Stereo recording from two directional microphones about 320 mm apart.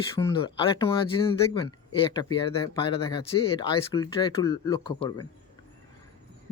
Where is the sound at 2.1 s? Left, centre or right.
Centre.